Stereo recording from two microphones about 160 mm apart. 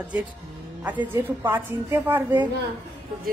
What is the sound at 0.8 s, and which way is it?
A woman's voice, 10° right (ahead or behind).